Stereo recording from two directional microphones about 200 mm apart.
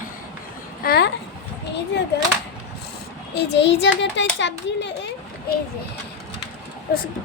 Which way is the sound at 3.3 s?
60° left (ahead or behind).